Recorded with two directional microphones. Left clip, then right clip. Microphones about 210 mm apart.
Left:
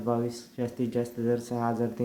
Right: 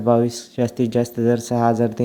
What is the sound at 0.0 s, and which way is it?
Speech, 30° right (ahead or behind).